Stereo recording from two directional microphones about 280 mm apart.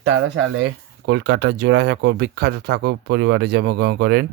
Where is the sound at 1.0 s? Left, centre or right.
Right.